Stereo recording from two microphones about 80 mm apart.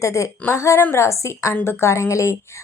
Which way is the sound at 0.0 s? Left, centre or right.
Left.